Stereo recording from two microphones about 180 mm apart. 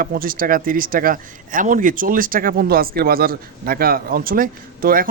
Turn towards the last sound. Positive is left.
turn(degrees=-50)  # may be behind; listen again after turning